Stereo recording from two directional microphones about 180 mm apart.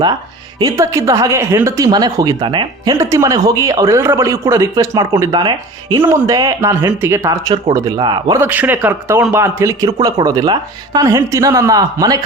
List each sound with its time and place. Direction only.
0.6 s speech: 15° right (ahead or behind)
8.4 s a man's voice: 10° right (ahead or behind)